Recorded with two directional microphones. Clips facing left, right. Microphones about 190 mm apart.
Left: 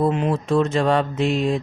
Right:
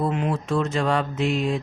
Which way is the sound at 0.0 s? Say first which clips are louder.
Left 4 dB; 25° left (ahead or behind).